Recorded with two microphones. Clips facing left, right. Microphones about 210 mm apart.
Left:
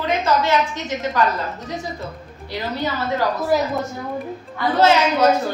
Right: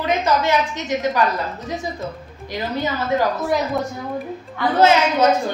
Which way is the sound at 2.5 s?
15° right (ahead or behind).